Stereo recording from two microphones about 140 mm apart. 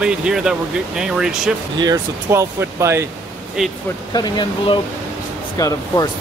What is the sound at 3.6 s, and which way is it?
Speech, 5° right (ahead or behind).